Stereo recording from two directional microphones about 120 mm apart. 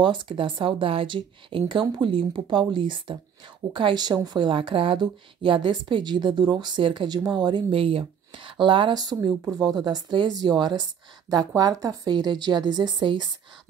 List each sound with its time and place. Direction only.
0.0 s a woman's voice: 40° right (ahead or behind)